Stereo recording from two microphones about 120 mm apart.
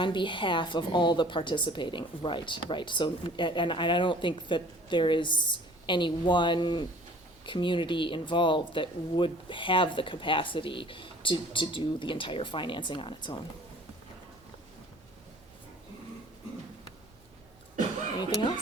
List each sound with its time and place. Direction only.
0.0 s a woman's voice: 40° left (ahead or behind)
18.2 s a woman's voice: 35° left (ahead or behind)